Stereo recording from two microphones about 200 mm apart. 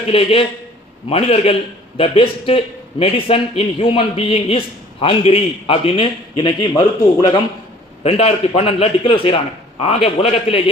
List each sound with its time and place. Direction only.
0.1 s a man's voice: 30° left (ahead or behind)
8.0 s a man's voice: 30° left (ahead or behind)